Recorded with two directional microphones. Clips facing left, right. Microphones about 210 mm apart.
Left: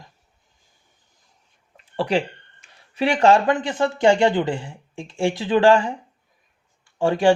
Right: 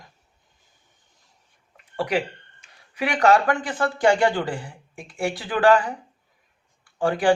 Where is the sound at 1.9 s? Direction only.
30° left (ahead or behind).